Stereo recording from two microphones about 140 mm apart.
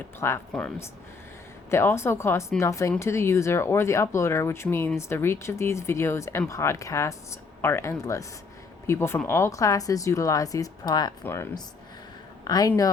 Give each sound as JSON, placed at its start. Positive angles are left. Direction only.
{"t": 0.2, "sound": "speech", "side_deg": 20}
{"t": 1.7, "sound": "speech", "side_deg": 15}
{"t": 12.5, "sound": "speech", "side_deg": 25}